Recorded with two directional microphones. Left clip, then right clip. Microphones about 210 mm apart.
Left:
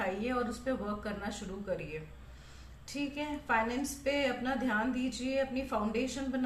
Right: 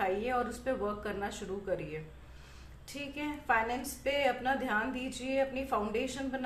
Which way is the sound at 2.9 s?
35° right (ahead or behind).